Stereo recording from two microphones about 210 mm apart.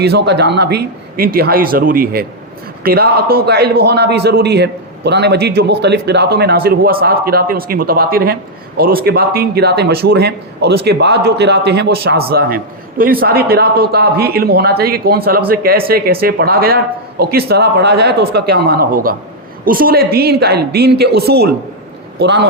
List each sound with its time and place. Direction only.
0.0 s speech: 50° right (ahead or behind)